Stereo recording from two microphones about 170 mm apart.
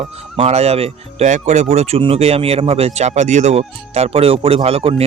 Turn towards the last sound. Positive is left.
turn(degrees=-35)  # may be behind; listen again after turning